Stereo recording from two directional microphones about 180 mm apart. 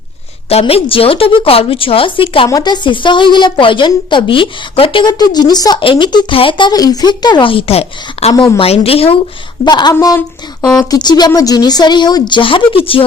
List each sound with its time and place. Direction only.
0.4 s a woman's voice: 35° left (ahead or behind)